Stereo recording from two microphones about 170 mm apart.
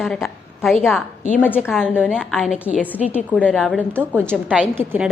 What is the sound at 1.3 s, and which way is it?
Speech, 10° left (ahead or behind).